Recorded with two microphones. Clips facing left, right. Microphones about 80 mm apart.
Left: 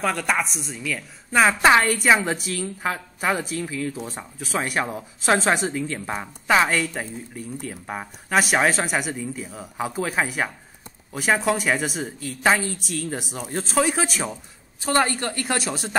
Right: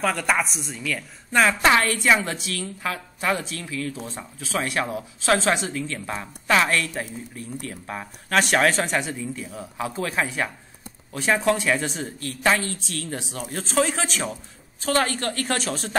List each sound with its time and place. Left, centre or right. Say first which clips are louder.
0.0 s speech: even; centre
1.5 s a woman's voice: left 2 dB; left